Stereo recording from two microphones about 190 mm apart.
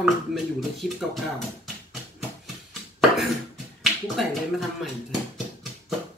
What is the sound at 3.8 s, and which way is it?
Speech, centre (ahead or behind).